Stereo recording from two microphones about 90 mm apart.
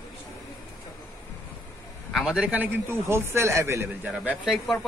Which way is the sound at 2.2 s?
10° right (ahead or behind).